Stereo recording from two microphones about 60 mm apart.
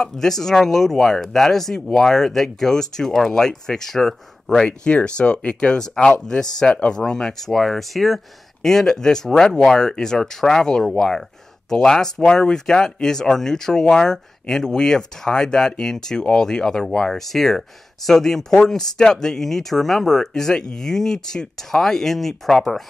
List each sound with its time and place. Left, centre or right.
0.0 s speech: centre
6.2 s speech: centre